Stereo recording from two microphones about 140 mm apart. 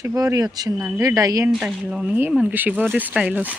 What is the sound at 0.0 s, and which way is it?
Speech, 20° right (ahead or behind).